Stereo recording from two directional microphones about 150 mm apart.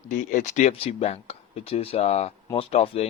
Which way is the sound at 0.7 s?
40° left (ahead or behind).